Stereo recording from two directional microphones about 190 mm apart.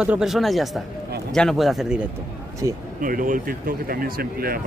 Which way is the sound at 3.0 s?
45° right (ahead or behind).